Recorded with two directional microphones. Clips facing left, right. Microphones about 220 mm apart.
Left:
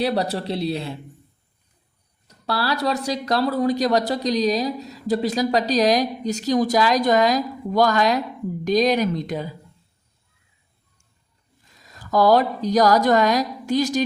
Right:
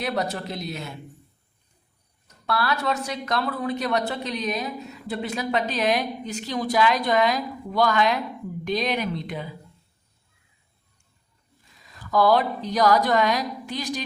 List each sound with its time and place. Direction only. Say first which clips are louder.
0.0 s a woman's voice: left 5 dB; 35° left (ahead or behind)
2.2 s a woman's voice: left 1 dB; 35° left (ahead or behind)
11.9 s a woman's voice: left 3 dB; 40° left (ahead or behind)